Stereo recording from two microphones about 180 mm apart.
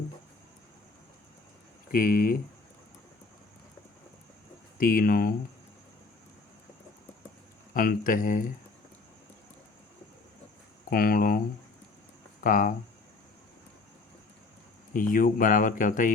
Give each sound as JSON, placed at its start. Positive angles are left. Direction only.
{"t": 1.9, "sound": "speech", "side_deg": 50}
{"t": 4.8, "sound": "speech", "side_deg": 50}
{"t": 7.7, "sound": "speech", "side_deg": 50}
{"t": 10.8, "sound": "speech", "side_deg": 55}
{"t": 12.4, "sound": "speech", "side_deg": 50}
{"t": 14.9, "sound": "speech", "side_deg": 50}